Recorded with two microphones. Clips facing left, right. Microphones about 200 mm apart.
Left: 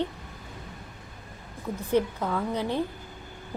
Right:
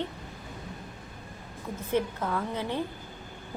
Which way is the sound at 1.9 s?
15° left (ahead or behind).